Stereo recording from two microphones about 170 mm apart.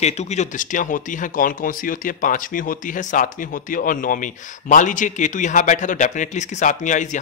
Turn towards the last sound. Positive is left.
turn(degrees=45)  # may be behind; listen again after turning